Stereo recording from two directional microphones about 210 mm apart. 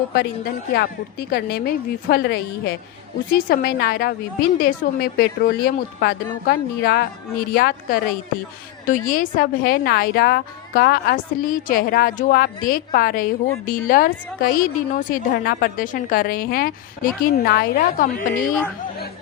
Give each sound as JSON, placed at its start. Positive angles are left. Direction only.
{"t": 0.1, "sound": "a woman's voice", "side_deg": 45}